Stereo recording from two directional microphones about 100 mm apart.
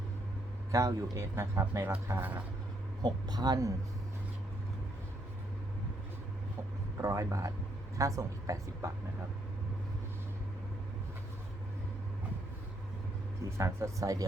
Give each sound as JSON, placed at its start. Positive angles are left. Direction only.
{"t": 0.7, "sound": "a man's voice", "side_deg": -35}
{"t": 3.0, "sound": "a woman's voice", "side_deg": -45}
{"t": 7.0, "sound": "a woman's voice", "side_deg": -35}
{"t": 13.6, "sound": "a woman's voice", "side_deg": -30}